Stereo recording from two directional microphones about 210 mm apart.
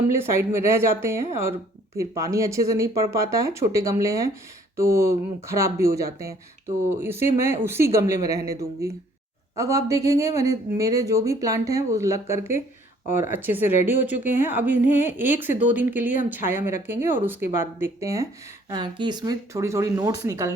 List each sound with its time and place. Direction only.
0.1 s speech: 10° right (ahead or behind)